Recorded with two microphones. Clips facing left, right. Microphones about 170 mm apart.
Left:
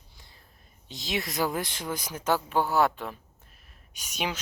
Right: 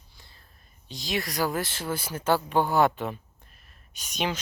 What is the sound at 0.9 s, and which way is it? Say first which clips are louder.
Speech: right 1 dB; 20° left (ahead or behind).